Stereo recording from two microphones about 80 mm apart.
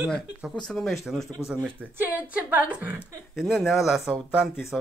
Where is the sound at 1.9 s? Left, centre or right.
Right.